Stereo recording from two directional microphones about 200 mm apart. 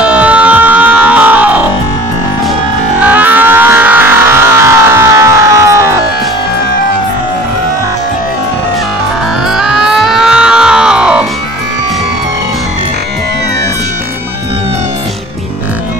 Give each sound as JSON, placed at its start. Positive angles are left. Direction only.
{"t": 0.0, "sound": "music", "side_deg": -5}
{"t": 3.0, "sound": "music", "side_deg": -10}
{"t": 9.5, "sound": "music", "side_deg": 0}